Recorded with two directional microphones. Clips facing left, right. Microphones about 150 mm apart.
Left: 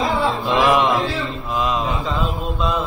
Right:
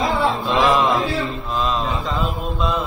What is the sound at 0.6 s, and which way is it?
Mantra, 20° left (ahead or behind).